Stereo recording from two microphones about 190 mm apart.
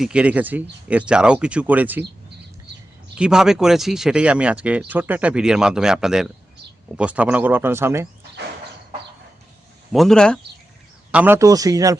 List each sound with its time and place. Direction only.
0.0 s speech: 5° right (ahead or behind)
3.2 s speech: 5° right (ahead or behind)
9.9 s speech: centre (ahead or behind)
11.1 s speech: 10° right (ahead or behind)